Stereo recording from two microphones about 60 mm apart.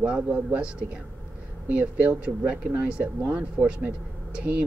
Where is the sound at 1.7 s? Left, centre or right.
Right.